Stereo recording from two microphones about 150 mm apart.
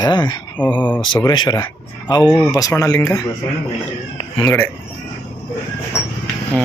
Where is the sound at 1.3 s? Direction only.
30° left (ahead or behind).